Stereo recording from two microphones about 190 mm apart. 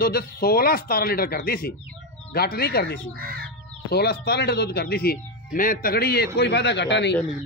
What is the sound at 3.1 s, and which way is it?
Speech, 50° right (ahead or behind).